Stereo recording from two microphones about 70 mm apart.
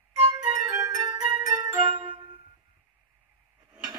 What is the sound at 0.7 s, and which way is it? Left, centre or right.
Music, right.